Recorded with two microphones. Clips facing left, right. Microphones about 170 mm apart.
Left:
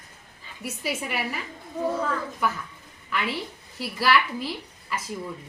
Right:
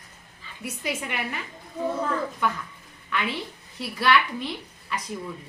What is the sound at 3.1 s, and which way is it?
A woman's voice, centre (ahead or behind).